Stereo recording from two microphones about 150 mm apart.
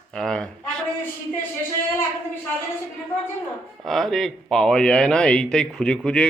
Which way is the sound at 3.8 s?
Centre (ahead or behind).